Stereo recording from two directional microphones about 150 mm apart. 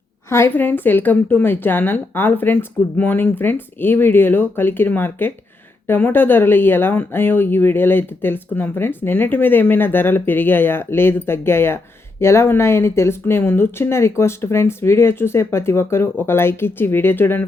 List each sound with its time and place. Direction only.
0.3 s speech: 15° left (ahead or behind)